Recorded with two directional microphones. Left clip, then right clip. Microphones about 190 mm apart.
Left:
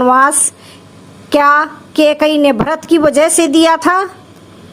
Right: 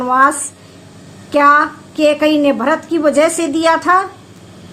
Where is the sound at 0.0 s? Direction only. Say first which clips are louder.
Left 3 dB; 50° left (ahead or behind).